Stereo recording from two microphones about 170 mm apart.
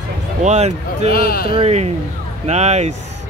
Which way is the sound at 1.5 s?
35° right (ahead or behind).